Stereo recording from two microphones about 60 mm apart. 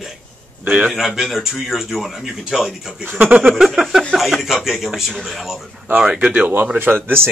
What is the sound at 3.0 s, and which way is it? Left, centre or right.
Speech, right.